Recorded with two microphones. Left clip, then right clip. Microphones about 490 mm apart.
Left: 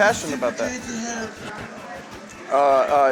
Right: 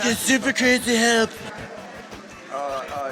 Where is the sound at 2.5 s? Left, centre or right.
Left.